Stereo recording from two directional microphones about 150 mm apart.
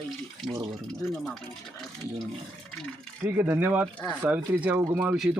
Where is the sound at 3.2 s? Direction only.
15° right (ahead or behind).